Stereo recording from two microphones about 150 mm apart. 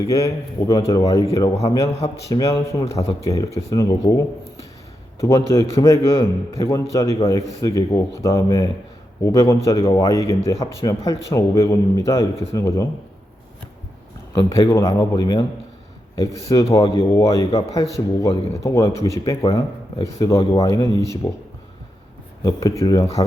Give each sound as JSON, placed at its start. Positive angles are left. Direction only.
{"t": 0.7, "sound": "a man's voice", "side_deg": 25}
{"t": 14.3, "sound": "a man's voice", "side_deg": 25}
{"t": 22.8, "sound": "a man's voice", "side_deg": 20}